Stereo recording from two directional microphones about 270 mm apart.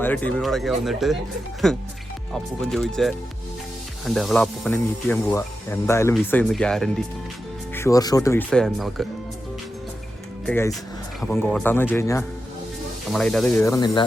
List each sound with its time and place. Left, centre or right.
0.0 s speech: centre
10.4 s speech: centre